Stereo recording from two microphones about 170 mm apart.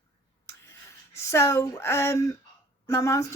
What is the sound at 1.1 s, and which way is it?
Speech, 15° left (ahead or behind).